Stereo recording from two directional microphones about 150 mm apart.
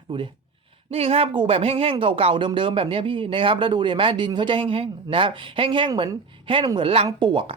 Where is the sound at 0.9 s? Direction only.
40° right (ahead or behind).